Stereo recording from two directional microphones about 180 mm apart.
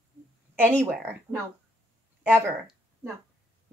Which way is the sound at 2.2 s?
10° right (ahead or behind).